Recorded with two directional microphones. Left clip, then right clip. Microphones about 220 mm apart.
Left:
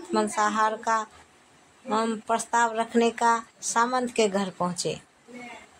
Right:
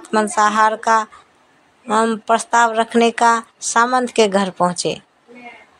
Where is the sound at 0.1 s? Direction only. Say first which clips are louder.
Right 9 dB; 30° right (ahead or behind).